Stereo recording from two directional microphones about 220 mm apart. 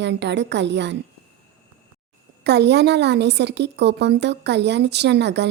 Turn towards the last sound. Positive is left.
turn(degrees=-50)  # may be behind; listen again after turning